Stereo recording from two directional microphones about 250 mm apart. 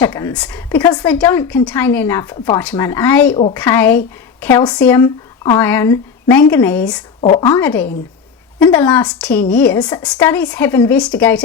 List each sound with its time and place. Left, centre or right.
0.0 s speech: centre
7.2 s a woman's voice: left
7.5 s a woman's voice: centre